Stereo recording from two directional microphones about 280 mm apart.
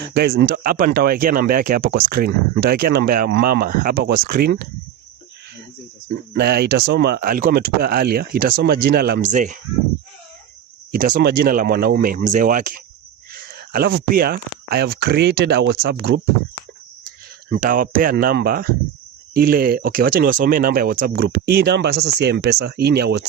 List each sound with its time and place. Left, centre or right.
0.1 s speech: right
6.3 s speech: right
10.9 s speech: right
17.5 s speech: right